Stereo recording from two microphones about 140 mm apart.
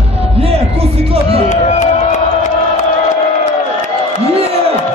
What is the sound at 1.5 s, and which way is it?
Crowd, 60° left (ahead or behind).